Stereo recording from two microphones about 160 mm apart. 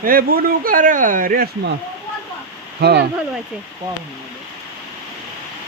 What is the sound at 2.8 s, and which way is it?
Speech, 90° right.